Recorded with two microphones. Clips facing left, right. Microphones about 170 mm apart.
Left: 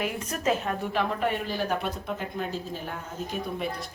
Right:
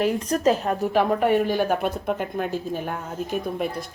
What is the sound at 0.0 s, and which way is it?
A woman's voice, 35° right (ahead or behind).